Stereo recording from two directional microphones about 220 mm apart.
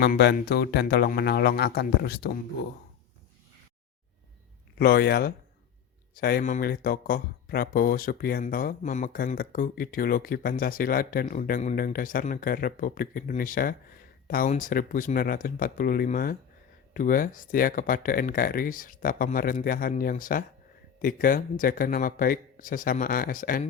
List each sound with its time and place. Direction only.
0.0 s speech: 45° left (ahead or behind)
4.8 s speech: 45° left (ahead or behind)